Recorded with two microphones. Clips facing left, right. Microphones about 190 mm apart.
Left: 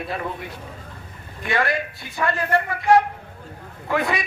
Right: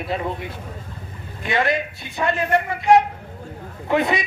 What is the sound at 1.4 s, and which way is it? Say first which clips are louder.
A man's voice: right 2 dB; 20° right (ahead or behind).